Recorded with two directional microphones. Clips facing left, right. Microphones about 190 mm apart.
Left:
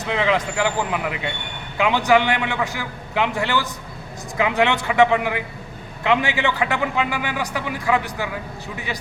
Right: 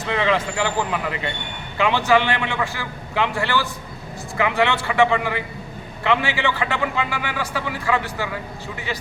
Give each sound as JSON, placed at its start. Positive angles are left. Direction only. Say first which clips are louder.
{"t": 0.1, "sound": "a man's voice", "louder": "even", "side_deg": 15}